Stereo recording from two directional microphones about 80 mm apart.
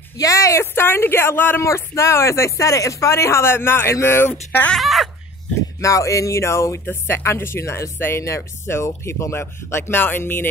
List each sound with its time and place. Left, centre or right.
0.2 s speech: left
1.6 s speech: left
4.7 s speech: centre
5.8 s speech: left